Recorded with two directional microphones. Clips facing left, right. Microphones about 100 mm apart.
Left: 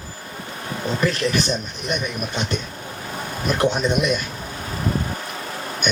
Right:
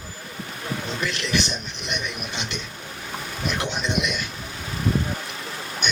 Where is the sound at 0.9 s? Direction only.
40° left (ahead or behind).